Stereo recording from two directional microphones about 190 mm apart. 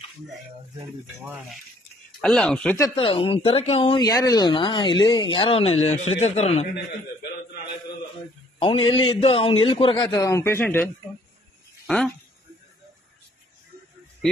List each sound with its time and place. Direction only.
2.2 s speech: 5° left (ahead or behind)
2.9 s speech: 30° left (ahead or behind)
8.5 s speech: 30° left (ahead or behind); by 10.9 s 10° left (ahead or behind)
11.8 s a sound: centre (ahead or behind)